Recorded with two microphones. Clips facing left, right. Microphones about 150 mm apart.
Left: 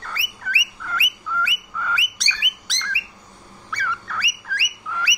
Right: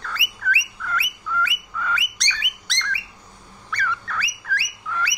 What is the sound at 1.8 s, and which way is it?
Bird, 5° left (ahead or behind).